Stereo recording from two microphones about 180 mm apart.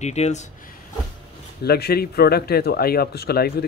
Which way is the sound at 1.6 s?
60° left (ahead or behind).